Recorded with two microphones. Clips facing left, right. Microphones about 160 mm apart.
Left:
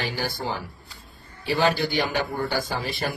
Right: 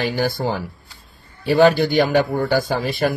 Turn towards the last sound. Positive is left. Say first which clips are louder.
# right 8 dB
turn(degrees=-50)  # may be behind; listen again after turning